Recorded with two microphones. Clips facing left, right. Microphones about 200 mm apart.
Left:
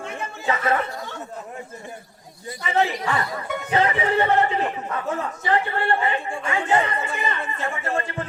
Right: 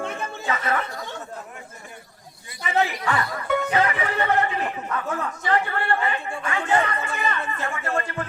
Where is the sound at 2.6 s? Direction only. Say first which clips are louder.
Left 1 dB; 25° left (ahead or behind).